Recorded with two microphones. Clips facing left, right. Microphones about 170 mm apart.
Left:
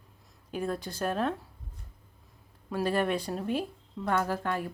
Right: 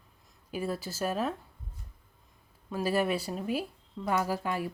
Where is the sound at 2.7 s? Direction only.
5° right (ahead or behind).